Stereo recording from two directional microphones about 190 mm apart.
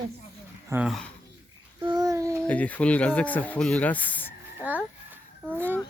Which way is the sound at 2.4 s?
10° left (ahead or behind).